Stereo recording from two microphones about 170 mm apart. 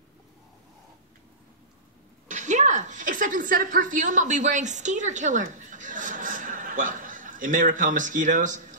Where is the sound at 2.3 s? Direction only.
45° right (ahead or behind).